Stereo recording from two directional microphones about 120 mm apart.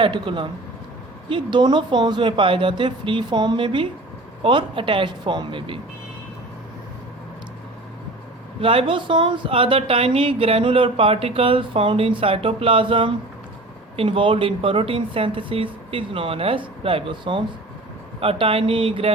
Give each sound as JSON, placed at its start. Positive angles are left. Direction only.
{"t": 0.0, "sound": "speech", "side_deg": -40}
{"t": 8.6, "sound": "speech", "side_deg": -50}